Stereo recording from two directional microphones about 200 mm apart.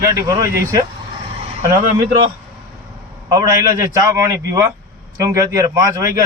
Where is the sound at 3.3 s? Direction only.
15° right (ahead or behind).